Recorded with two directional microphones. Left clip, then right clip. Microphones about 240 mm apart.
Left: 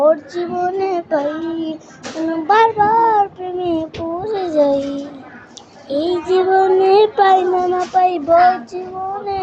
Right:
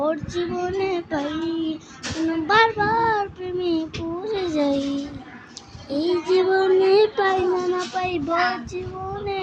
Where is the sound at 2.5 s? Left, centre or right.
Right.